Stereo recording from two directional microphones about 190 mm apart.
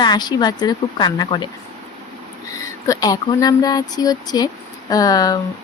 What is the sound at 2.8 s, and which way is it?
A woman's voice, 15° left (ahead or behind).